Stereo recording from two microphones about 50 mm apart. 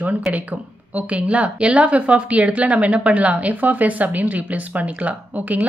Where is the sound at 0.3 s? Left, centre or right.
Right.